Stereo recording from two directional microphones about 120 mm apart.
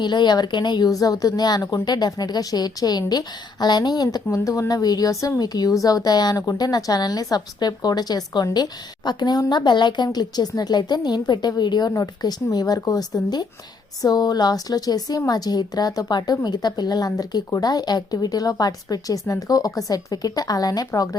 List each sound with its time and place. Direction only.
0.0 s speech: 40° left (ahead or behind)